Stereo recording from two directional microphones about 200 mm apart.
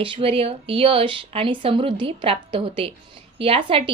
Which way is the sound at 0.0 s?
30° right (ahead or behind).